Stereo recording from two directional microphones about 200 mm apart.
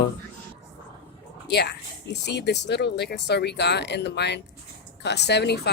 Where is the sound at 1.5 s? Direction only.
55° left (ahead or behind).